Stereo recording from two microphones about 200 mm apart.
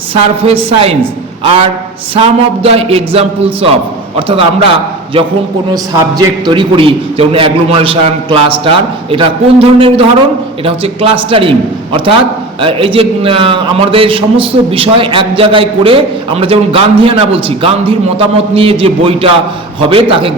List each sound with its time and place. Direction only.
0.1 s a man's voice: 30° right (ahead or behind)
2.1 s a man's voice: 30° right (ahead or behind)
4.3 s a man's voice: 25° right (ahead or behind)
12.6 s a man's voice: 25° right (ahead or behind)